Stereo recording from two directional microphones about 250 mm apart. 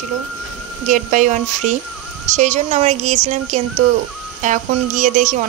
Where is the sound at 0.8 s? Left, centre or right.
Right.